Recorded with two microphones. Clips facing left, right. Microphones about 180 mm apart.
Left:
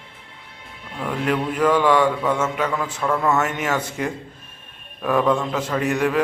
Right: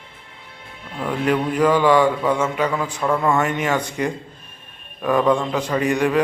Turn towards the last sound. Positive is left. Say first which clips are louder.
# right 2 dB
turn(degrees=5)  # may be behind; listen again after turning